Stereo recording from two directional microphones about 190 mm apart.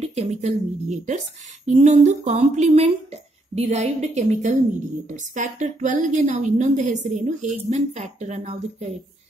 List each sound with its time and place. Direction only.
0.0 s a woman's voice: 35° right (ahead or behind)